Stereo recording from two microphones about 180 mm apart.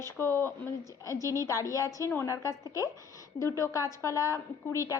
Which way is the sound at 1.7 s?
15° left (ahead or behind).